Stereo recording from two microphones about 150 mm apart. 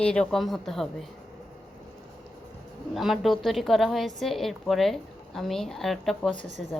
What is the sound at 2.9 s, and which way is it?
Speech, centre (ahead or behind).